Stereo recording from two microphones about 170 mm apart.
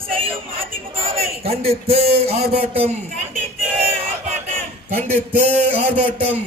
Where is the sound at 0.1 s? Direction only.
30° right (ahead or behind).